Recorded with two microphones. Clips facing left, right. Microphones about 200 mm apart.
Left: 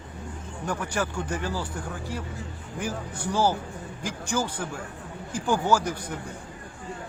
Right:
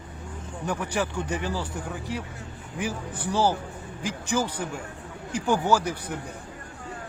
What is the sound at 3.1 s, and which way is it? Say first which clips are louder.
Speech: even; 10° left (ahead or behind).